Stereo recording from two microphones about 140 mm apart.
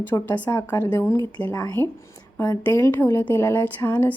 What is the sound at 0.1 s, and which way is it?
A woman's voice, 10° left (ahead or behind).